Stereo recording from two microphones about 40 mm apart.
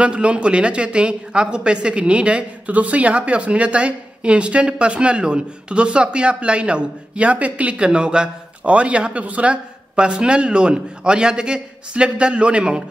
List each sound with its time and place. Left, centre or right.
0.0 s speech: right